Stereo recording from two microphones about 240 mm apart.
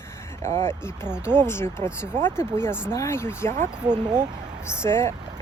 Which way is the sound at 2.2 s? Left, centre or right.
Centre.